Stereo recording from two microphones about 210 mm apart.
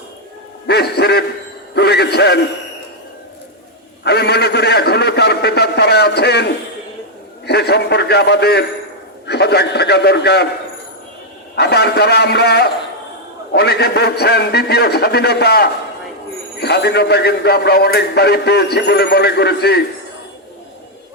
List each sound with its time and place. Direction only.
0.7 s a man's voice: 50° left (ahead or behind)
4.0 s a man's voice: 50° left (ahead or behind)
7.4 s a man's voice: 50° left (ahead or behind)
11.5 s a man's voice: 50° left (ahead or behind)